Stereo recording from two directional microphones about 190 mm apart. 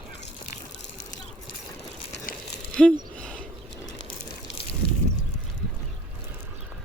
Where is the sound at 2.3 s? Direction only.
45° left (ahead or behind).